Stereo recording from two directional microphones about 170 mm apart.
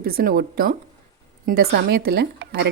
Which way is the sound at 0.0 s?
60° right (ahead or behind).